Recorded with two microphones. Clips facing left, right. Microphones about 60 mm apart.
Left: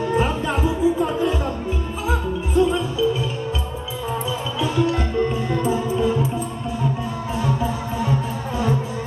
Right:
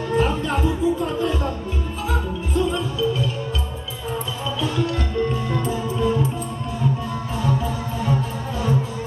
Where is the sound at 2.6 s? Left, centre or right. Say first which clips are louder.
Left 4 dB; centre.